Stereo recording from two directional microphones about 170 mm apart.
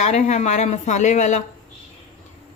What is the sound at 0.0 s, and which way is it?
Speech, 45° left (ahead or behind).